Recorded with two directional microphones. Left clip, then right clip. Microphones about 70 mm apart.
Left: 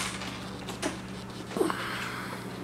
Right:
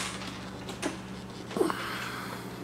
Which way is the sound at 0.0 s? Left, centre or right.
Centre.